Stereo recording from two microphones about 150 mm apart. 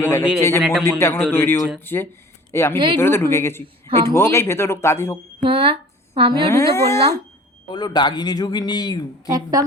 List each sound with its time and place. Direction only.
0.0 s a man's voice: 20° left (ahead or behind)
0.6 s a man's voice: 5° right (ahead or behind)
0.9 s speech: 15° left (ahead or behind)
5.4 s speech: 35° right (ahead or behind)
6.5 s a man's voice: 20° left (ahead or behind)
9.3 s a woman's voice: 25° right (ahead or behind)